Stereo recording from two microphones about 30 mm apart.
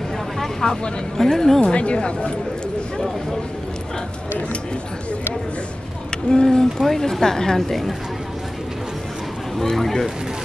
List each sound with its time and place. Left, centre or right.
0.4 s vehicle: centre
1.1 s speech: centre
1.6 s a woman's voice: left
6.3 s speech: left
6.8 s speech: centre
9.6 s speech: centre